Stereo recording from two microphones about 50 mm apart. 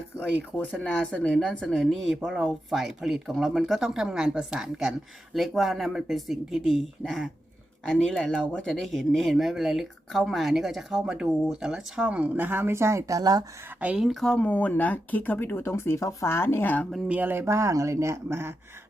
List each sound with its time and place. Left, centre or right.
0.2 s speech: left
0.9 s speech: centre
1.8 s speech: centre
7.9 s speech: centre
8.7 s speech: centre
12.0 s speech: right
12.6 s speech: right
14.0 s speech: centre
14.3 s speech: left
15.7 s speech: left
17.4 s speech: right